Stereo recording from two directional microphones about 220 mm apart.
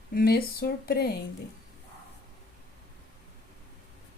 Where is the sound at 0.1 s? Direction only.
40° left (ahead or behind).